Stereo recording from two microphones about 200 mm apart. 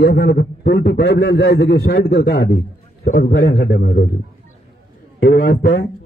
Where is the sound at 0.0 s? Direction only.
50° left (ahead or behind).